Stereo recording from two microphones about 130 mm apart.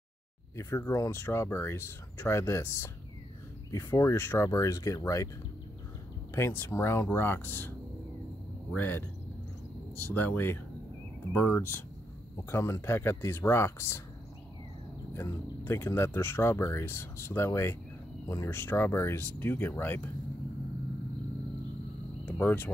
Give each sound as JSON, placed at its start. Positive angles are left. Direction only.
{"t": 0.6, "sound": "speech", "side_deg": 20}
{"t": 6.3, "sound": "speech", "side_deg": 20}
{"t": 8.7, "sound": "speech", "side_deg": 15}
{"t": 15.1, "sound": "speech", "side_deg": 20}
{"t": 22.2, "sound": "a sound", "side_deg": 15}